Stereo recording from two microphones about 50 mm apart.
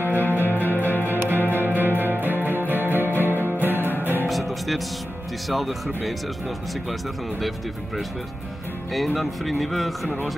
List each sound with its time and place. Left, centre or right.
0.1 s music: left
0.4 s music: right
0.7 s music: left
1.0 s music: right
4.3 s music: centre
5.5 s speech: centre
6.9 s speech: centre